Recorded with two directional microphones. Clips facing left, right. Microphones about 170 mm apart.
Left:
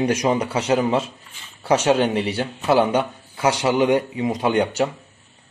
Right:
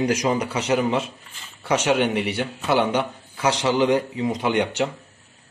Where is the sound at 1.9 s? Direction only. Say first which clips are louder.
Left 2 dB; 15° right (ahead or behind).